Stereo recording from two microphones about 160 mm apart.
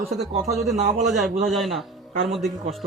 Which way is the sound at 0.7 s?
45° right (ahead or behind).